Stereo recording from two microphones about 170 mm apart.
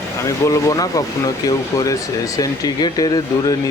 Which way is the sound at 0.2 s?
20° left (ahead or behind).